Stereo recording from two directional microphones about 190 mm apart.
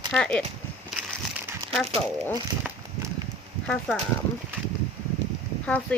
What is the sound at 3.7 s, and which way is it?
Speech, 5° left (ahead or behind).